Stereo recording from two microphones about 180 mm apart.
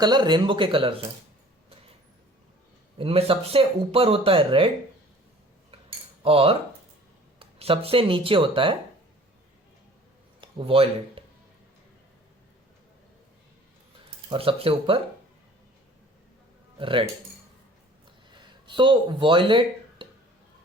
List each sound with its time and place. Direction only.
0.0 s speech: 25° right (ahead or behind)
3.0 s speech: 30° right (ahead or behind)
6.2 s speech: 30° right (ahead or behind)
10.4 s speech: 30° right (ahead or behind)
14.3 s speech: 30° right (ahead or behind)
16.7 s speech: 30° right (ahead or behind)
18.3 s a sound: 25° right (ahead or behind)